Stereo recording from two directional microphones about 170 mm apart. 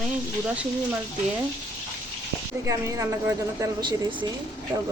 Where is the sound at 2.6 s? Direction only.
20° right (ahead or behind).